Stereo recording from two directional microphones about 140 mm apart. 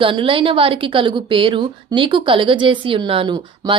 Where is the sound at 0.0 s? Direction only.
40° right (ahead or behind).